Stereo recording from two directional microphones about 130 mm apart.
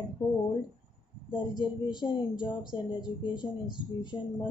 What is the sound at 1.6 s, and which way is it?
A woman's voice, 35° left (ahead or behind).